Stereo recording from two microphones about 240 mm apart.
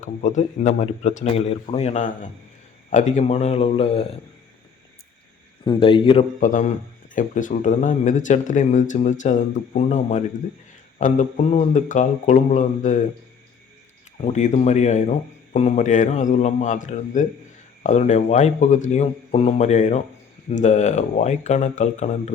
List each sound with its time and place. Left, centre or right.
0.0 s speech: left
5.6 s a man's voice: left
14.2 s speech: left